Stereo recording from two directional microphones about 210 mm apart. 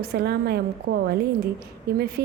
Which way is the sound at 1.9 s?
50° right (ahead or behind).